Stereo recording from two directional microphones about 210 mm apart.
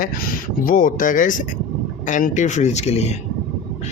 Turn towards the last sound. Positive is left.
turn(degrees=30)  # may be behind; listen again after turning